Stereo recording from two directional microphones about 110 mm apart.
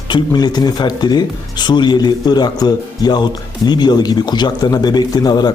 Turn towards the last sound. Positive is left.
turn(degrees=35)  # may be behind; listen again after turning